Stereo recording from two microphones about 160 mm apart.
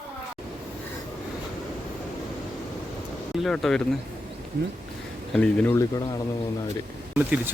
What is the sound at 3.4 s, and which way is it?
Speech, centre (ahead or behind).